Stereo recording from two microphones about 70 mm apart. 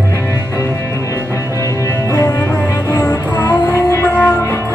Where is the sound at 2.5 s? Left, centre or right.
Left.